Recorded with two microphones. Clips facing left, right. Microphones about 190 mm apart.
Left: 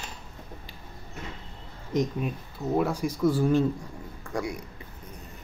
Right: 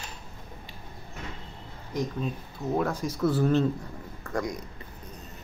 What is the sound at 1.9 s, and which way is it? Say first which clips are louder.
Speech: left 4 dB; 20° left (ahead or behind).